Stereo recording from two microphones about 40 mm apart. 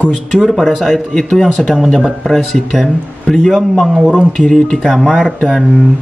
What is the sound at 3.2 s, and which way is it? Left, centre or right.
Speech, centre.